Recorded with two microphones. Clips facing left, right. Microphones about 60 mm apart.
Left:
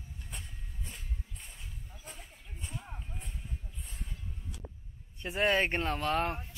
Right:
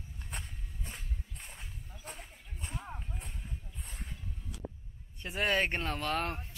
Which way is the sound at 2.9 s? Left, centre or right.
Centre.